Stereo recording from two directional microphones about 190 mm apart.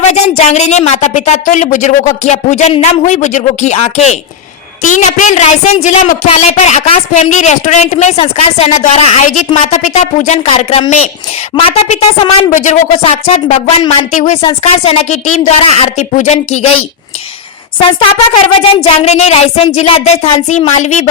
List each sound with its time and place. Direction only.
0.1 s a woman's voice: 35° left (ahead or behind)
17.7 s a woman's voice: 30° left (ahead or behind)